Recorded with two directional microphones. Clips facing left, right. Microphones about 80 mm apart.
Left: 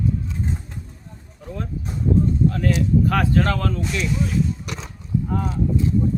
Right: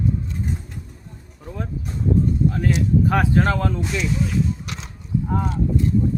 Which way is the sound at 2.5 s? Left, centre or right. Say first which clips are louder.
Even; centre.